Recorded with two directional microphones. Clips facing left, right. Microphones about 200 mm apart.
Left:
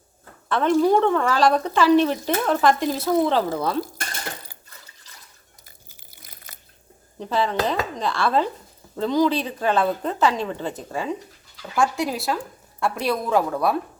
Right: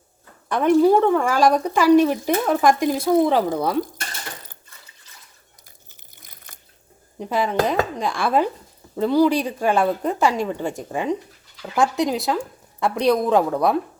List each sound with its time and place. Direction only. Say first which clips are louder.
0.4 s speech: right 3 dB; 10° right (ahead or behind)
5.6 s water: left 2 dB; 10° left (ahead or behind)
7.2 s a woman's voice: right 2 dB; 15° right (ahead or behind)